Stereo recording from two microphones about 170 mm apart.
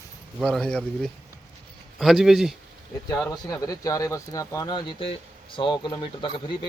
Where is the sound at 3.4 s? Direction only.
20° left (ahead or behind).